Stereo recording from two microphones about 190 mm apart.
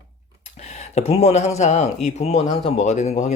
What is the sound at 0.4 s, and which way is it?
Speech, 35° left (ahead or behind).